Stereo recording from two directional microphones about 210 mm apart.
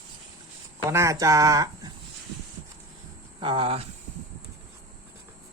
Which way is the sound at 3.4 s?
25° right (ahead or behind).